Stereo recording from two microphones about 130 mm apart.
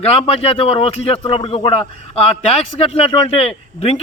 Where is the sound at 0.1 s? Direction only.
50° left (ahead or behind).